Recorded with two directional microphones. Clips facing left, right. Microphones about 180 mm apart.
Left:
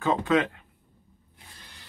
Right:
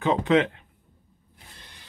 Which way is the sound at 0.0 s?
20° right (ahead or behind).